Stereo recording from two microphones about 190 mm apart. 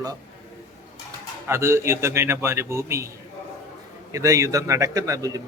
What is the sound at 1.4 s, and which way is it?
A man's voice, 15° right (ahead or behind).